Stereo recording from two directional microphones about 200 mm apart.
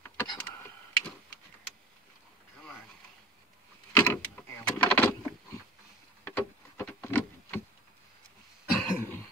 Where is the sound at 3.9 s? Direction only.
10° left (ahead or behind).